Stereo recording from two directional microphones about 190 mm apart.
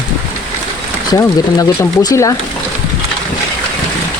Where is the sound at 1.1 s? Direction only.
20° left (ahead or behind).